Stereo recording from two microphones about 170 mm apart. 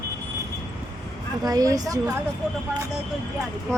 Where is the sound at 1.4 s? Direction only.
20° right (ahead or behind).